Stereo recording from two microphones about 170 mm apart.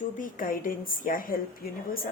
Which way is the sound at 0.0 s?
50° left (ahead or behind).